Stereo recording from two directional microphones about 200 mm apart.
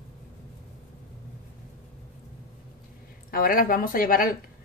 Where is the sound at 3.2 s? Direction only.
45° left (ahead or behind).